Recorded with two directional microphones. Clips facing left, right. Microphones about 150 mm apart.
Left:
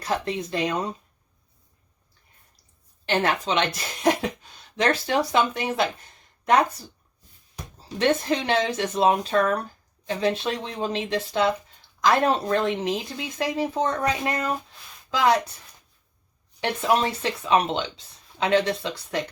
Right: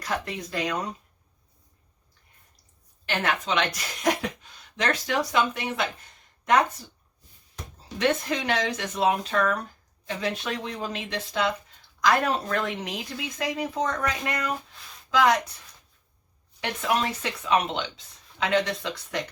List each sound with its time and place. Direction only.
0.0 s speech: 25° left (ahead or behind)
3.1 s speech: 30° left (ahead or behind)
7.8 s speech: 30° left (ahead or behind)
16.6 s speech: 30° left (ahead or behind)